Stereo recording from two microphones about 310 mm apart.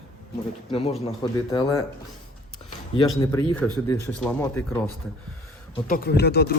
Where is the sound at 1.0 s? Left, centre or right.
Centre.